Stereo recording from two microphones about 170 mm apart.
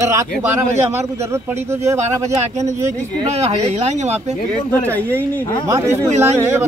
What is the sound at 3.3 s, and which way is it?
Speech, 40° right (ahead or behind).